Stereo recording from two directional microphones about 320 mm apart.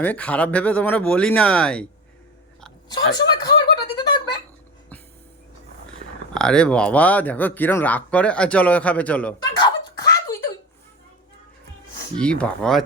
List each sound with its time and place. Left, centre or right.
0.0 s speech: centre
2.9 s speech: centre
3.9 s a sound: centre
6.0 s a sound: right
6.3 s a man's voice: centre
12.1 s speech: centre